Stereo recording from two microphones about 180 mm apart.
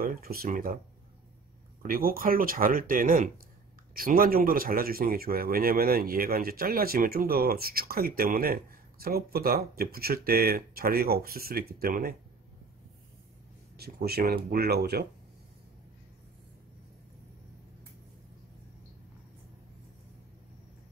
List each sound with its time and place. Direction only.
0.0 s speech: 55° right (ahead or behind)
1.8 s speech: 55° right (ahead or behind)
13.7 s speech: 60° right (ahead or behind)